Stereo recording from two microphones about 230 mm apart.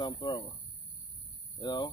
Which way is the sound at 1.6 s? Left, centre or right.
Centre.